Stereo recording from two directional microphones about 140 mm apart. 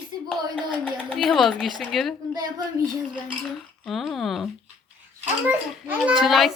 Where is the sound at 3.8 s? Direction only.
Centre (ahead or behind).